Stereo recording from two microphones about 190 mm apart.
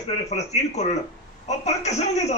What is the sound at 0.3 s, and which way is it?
A man's voice, 35° left (ahead or behind).